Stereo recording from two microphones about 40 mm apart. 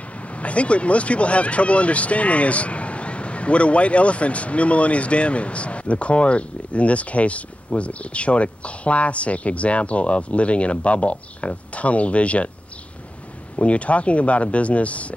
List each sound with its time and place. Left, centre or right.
0.2 s speech: left
13.6 s speech: left